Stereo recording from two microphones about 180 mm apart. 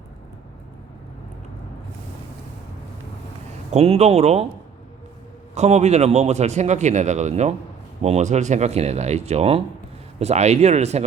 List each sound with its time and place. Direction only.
3.7 s a man's voice: 35° right (ahead or behind)
5.5 s a man's voice: 40° right (ahead or behind)